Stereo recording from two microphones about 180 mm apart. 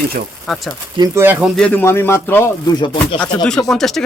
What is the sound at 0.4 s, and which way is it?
Speech, centre (ahead or behind).